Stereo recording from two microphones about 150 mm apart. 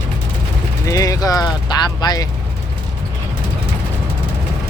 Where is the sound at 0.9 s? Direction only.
25° left (ahead or behind).